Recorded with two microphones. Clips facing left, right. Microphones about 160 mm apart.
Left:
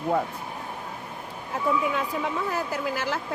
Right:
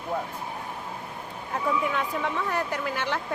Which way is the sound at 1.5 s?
5° left (ahead or behind).